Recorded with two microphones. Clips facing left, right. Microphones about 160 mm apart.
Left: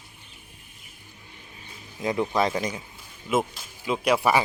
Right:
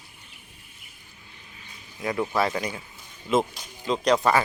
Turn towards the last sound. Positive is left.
turn(degrees=10)  # may be behind; listen again after turning